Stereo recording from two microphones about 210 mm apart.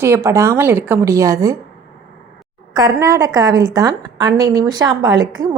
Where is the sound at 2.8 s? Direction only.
15° right (ahead or behind).